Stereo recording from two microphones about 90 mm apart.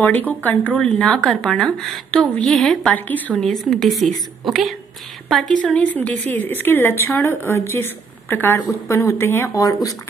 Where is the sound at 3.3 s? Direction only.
5° left (ahead or behind).